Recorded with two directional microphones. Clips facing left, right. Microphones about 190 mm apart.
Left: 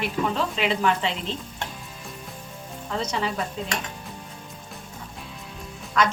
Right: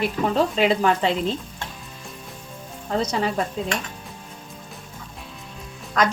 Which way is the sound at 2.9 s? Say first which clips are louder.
Right 4 dB; 40° right (ahead or behind).